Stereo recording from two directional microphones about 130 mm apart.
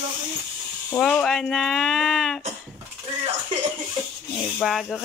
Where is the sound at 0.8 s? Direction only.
10° left (ahead or behind).